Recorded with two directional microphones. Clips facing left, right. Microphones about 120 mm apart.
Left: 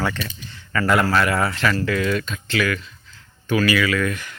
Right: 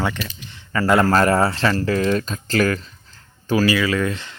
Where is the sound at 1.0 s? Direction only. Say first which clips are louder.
Right 4 dB; 40° right (ahead or behind).